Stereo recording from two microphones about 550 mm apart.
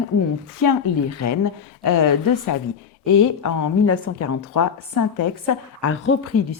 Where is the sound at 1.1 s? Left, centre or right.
Left.